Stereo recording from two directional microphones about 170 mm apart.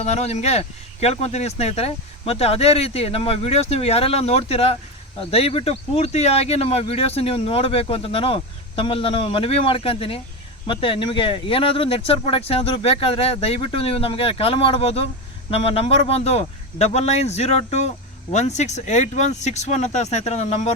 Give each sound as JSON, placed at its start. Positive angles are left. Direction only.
{"t": 0.0, "sound": "speech", "side_deg": 40}